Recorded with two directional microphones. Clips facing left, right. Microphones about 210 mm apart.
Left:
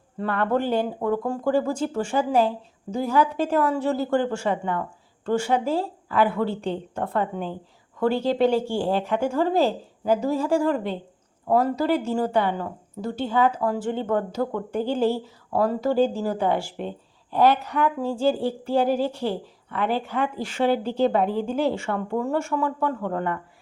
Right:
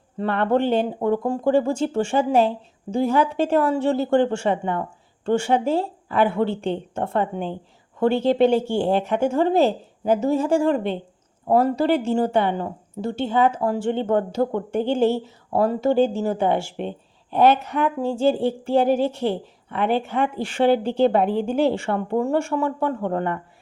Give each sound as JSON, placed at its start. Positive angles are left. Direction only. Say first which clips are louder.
{"t": 0.2, "sound": "speech", "louder": "right 3 dB", "side_deg": -25}